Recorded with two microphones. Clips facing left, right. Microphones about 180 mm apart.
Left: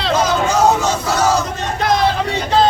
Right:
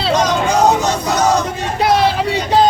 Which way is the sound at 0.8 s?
15° right (ahead or behind).